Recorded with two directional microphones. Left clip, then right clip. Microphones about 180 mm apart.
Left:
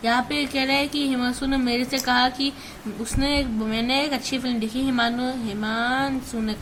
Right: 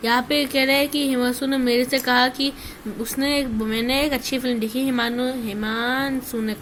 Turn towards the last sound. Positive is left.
turn(degrees=-10)  # may be behind; listen again after turning